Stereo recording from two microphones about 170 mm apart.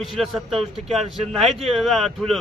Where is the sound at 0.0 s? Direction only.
Centre (ahead or behind).